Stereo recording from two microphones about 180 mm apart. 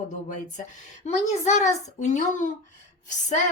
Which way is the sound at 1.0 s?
40° left (ahead or behind).